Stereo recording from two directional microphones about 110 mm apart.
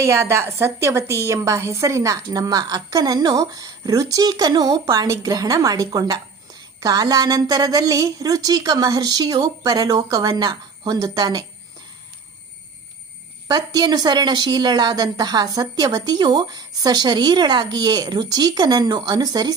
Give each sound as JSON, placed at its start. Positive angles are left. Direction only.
{"t": 0.0, "sound": "a woman's voice", "side_deg": -25}
{"t": 13.5, "sound": "a woman's voice", "side_deg": -40}